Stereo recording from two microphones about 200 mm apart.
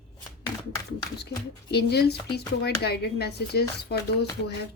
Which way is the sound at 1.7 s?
55° left (ahead or behind).